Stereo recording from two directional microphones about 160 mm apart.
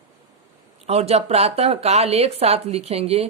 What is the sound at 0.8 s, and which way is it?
Speech, 40° right (ahead or behind).